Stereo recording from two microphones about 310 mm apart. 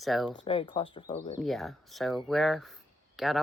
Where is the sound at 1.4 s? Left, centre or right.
Centre.